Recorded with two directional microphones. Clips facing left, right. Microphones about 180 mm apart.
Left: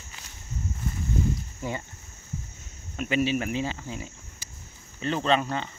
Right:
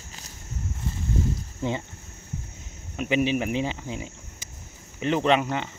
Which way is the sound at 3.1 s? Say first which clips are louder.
Right 2 dB; 15° right (ahead or behind).